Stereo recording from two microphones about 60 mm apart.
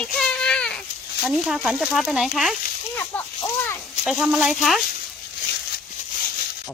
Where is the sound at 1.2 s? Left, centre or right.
Centre.